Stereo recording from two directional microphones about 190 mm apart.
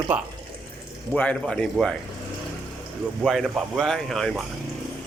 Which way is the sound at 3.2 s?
Centre (ahead or behind).